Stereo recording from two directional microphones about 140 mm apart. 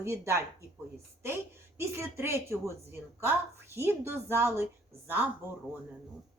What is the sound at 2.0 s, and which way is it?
A woman's voice, 20° right (ahead or behind).